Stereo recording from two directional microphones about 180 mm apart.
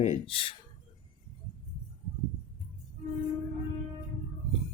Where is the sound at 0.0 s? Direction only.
35° left (ahead or behind).